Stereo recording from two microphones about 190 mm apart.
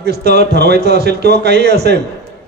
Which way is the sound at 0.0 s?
55° right (ahead or behind).